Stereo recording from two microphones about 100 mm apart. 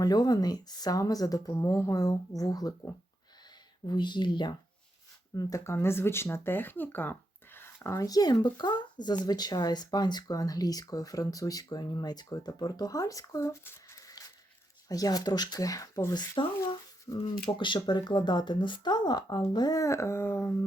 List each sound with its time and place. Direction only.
0.0 s speech: 40° left (ahead or behind)
5.3 s speech: 35° left (ahead or behind)
7.9 s speech: 35° left (ahead or behind)
16.4 s speech: 60° left (ahead or behind)
17.1 s speech: 30° left (ahead or behind)
17.6 s speech: 50° left (ahead or behind)
19.5 s a sound: 40° left (ahead or behind); by 20.7 s 20° left (ahead or behind)